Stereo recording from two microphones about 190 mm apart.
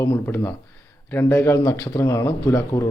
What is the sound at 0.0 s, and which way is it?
A man's voice, 15° left (ahead or behind).